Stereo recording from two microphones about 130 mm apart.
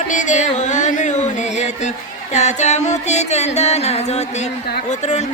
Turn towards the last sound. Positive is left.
turn(degrees=55)  # may be behind; listen again after turning